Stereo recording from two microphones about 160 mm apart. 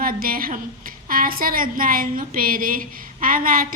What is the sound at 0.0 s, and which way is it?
A woman's voice, 65° right (ahead or behind).